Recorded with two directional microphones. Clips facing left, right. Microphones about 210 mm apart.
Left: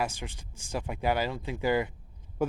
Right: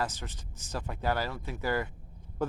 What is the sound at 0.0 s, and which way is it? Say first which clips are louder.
Speech: left 2 dB; 10° left (ahead or behind).